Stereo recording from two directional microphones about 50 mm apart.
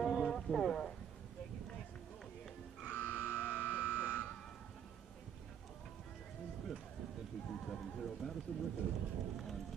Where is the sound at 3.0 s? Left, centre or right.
Left.